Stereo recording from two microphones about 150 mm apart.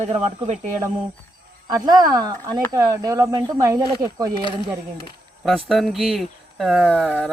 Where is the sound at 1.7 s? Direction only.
25° right (ahead or behind).